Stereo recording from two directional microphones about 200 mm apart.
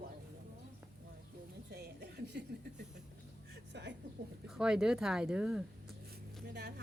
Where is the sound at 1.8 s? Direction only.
55° right (ahead or behind).